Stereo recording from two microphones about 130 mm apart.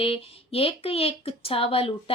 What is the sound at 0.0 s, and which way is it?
Speech, 45° left (ahead or behind).